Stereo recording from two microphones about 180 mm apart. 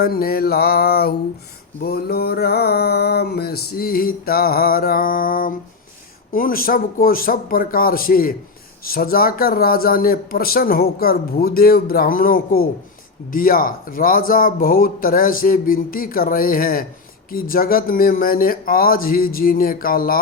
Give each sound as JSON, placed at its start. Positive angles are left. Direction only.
{"t": 0.0, "sound": "a man's voice", "side_deg": 55}